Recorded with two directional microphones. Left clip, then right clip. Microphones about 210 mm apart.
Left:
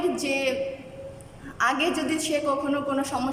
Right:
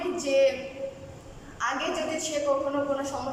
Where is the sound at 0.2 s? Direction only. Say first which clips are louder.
Right 4 dB; 55° left (ahead or behind).